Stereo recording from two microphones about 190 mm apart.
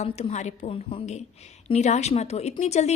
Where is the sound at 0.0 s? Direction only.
35° left (ahead or behind).